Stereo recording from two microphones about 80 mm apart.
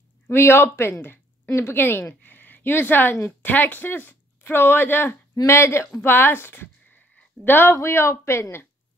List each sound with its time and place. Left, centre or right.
0.3 s a woman's voice: left